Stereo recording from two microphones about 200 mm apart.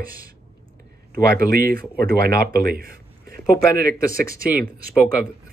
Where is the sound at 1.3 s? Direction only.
45° right (ahead or behind).